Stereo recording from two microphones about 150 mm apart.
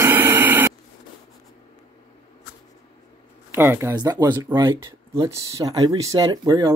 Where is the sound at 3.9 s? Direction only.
25° right (ahead or behind).